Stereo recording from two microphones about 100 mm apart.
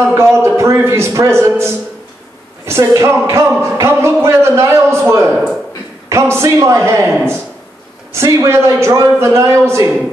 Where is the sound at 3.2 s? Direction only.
25° right (ahead or behind).